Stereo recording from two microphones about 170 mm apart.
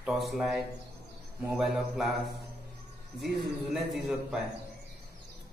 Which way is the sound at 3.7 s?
Centre (ahead or behind).